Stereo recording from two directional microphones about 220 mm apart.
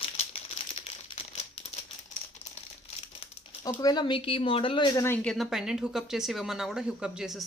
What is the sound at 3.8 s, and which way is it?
Speech, 20° left (ahead or behind).